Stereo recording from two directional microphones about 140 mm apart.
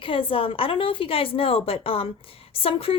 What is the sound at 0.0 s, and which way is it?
A woman's voice, 40° left (ahead or behind).